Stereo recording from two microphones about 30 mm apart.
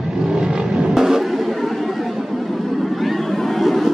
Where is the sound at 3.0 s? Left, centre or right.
Centre.